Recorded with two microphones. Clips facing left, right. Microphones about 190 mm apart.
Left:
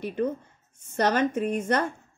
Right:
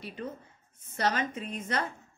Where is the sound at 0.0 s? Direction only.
55° left (ahead or behind).